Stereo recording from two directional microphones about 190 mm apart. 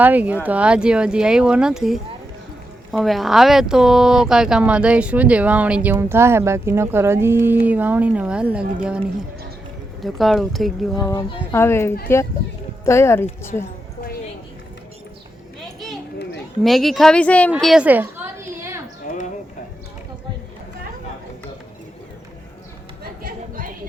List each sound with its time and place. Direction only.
0.0 s speech: 10° right (ahead or behind)
10.0 s speech: centre (ahead or behind)
10.9 s speech: 20° left (ahead or behind)
16.6 s speech: centre (ahead or behind)
17.5 s a sound: centre (ahead or behind)
23.2 s chatter: 45° right (ahead or behind)